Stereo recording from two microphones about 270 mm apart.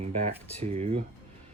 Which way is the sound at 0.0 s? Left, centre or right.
Right.